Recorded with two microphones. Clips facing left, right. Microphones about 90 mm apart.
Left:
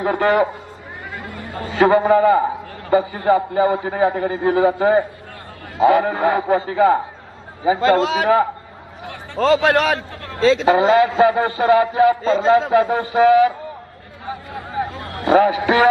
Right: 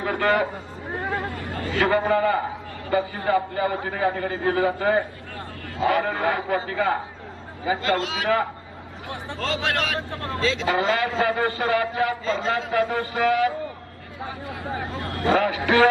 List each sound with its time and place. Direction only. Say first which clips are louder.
0.0 s a man's voice: left 6 dB; 35° left (ahead or behind)
1.5 s a man's voice: left 7 dB; 25° left (ahead or behind)
9.5 s a man's voice: left 11 dB; 55° left (ahead or behind)
10.4 s a man's voice: left 9 dB; 35° left (ahead or behind)
15.1 s a man's voice: left 7 dB; 20° left (ahead or behind)